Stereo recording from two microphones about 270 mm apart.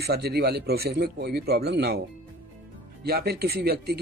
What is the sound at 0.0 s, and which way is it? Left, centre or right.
Speech, right.